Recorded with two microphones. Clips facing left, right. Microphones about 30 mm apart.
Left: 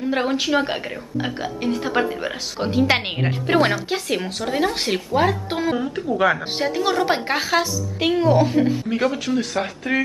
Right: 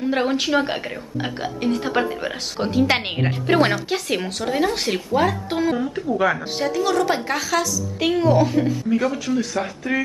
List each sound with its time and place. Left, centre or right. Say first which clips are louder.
0.0 s a woman's voice: right 1 dB; centre
6.7 s a woman's voice: even; left
8.1 s speech: even; centre
8.6 s a woman's voice: even; left